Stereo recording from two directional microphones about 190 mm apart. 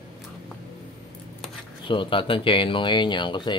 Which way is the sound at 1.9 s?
25° left (ahead or behind).